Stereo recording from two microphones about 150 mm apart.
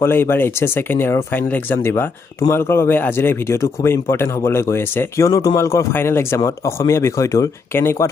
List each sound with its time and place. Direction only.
0.0 s speech: 15° left (ahead or behind)